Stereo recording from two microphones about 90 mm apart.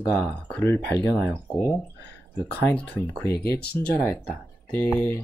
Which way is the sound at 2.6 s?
15° left (ahead or behind).